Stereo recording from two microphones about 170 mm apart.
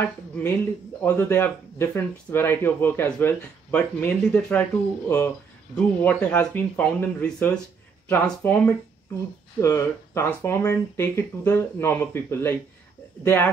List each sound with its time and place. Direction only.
1.0 s speech: 10° left (ahead or behind)